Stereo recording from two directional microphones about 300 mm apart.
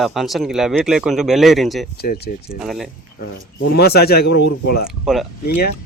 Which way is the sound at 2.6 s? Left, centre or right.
Centre.